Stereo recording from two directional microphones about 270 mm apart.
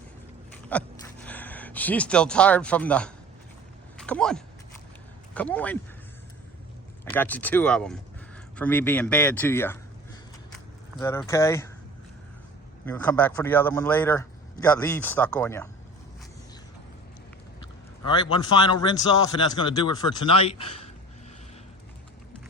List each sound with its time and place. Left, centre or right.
0.7 s speech: centre
7.0 s speech: centre
11.0 s speech: centre
12.8 s speech: centre
18.0 s speech: centre